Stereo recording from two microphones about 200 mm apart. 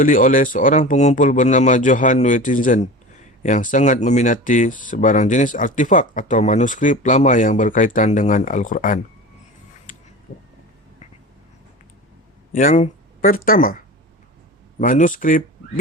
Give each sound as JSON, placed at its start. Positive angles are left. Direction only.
{"t": 0.0, "sound": "speech", "side_deg": 40}
{"t": 12.5, "sound": "speech", "side_deg": 40}